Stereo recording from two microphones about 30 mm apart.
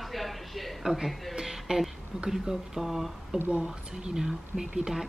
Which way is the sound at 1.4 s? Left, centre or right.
Centre.